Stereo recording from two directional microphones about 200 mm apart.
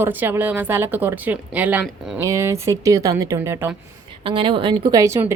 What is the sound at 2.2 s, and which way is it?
A woman's voice, 15° right (ahead or behind).